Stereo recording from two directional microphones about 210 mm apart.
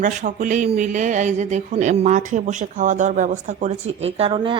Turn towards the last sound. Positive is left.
turn(degrees=-25)  # may be behind; listen again after turning